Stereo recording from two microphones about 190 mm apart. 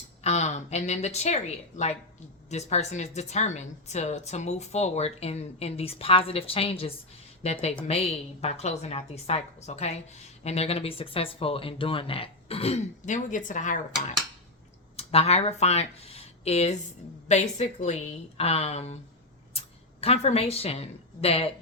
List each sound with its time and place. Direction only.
0.2 s a woman's voice: 35° left (ahead or behind)
14.9 s a woman's voice: 30° left (ahead or behind)